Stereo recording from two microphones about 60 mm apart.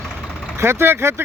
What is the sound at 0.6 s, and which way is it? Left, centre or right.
Speech, right.